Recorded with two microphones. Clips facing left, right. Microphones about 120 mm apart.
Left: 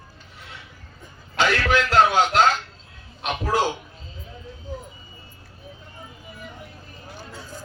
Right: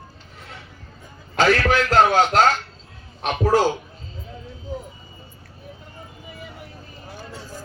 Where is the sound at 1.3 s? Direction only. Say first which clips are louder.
Right 3 dB; 40° right (ahead or behind).